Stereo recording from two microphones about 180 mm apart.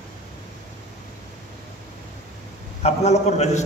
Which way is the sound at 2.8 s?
40° left (ahead or behind).